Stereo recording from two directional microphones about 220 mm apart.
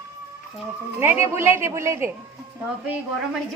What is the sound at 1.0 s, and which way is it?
A woman's voice, 10° right (ahead or behind).